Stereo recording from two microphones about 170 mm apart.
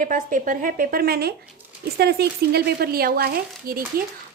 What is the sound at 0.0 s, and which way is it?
Speech, 50° right (ahead or behind).